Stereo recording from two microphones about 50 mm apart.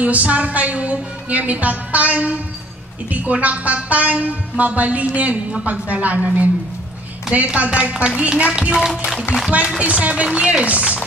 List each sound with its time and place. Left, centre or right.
0.0 s a woman's voice: right
8.8 s speech: centre
9.8 s speech: right